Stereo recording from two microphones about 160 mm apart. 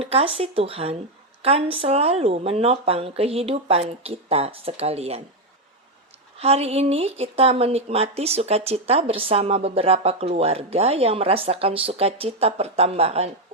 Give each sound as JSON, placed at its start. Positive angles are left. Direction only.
{"t": 0.0, "sound": "speech", "side_deg": -40}
{"t": 6.4, "sound": "speech", "side_deg": -40}